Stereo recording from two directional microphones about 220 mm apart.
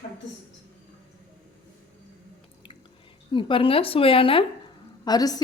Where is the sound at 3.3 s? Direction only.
20° left (ahead or behind).